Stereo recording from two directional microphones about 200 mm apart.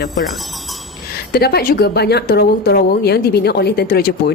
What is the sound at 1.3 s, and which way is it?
A woman's voice, 50° left (ahead or behind).